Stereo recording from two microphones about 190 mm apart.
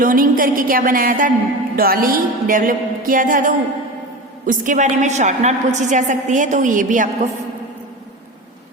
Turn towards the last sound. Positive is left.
turn(degrees=-45)  # may be behind; listen again after turning